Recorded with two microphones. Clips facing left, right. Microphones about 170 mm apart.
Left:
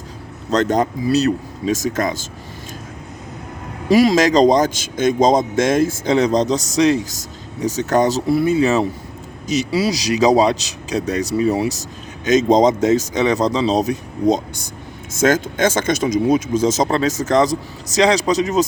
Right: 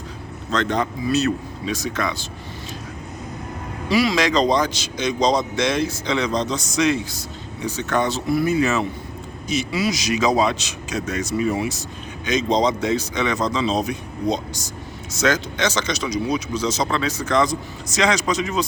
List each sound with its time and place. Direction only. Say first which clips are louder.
0.5 s speech: left 5 dB; 40° left (ahead or behind)
3.8 s a man's voice: left 6 dB; 45° left (ahead or behind)
8.4 s a man's voice: left 3 dB; 30° left (ahead or behind)